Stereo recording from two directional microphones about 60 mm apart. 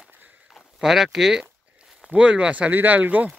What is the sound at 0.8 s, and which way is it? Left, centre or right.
Speech, centre.